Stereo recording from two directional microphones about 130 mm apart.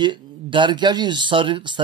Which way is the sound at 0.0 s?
35° right (ahead or behind).